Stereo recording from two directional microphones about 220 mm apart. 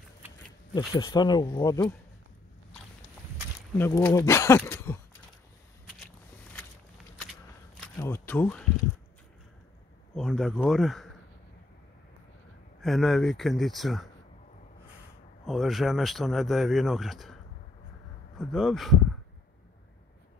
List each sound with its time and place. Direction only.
0.7 s speech: 20° left (ahead or behind)
3.7 s speech: 10° left (ahead or behind)
7.7 s a sound: 5° left (ahead or behind)
10.1 s speech: centre (ahead or behind)
12.8 s speech: centre (ahead or behind)
15.4 s speech: centre (ahead or behind)
18.4 s speech: centre (ahead or behind)